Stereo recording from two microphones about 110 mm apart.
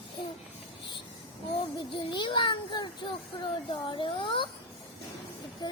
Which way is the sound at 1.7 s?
45° left (ahead or behind).